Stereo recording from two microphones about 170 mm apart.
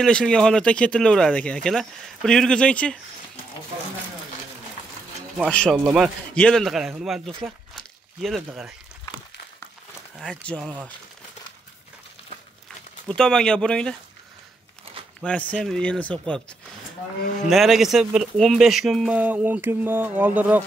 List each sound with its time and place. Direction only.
0.0 s speech: 5° left (ahead or behind)
5.4 s speech: 5° left (ahead or behind)
10.1 s speech: 5° left (ahead or behind)
13.1 s speech: 5° left (ahead or behind)
15.5 s speech: 5° left (ahead or behind)
17.5 s speech: centre (ahead or behind)